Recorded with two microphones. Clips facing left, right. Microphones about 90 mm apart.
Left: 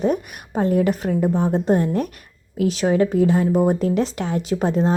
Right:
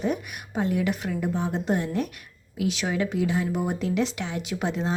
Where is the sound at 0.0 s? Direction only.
40° left (ahead or behind).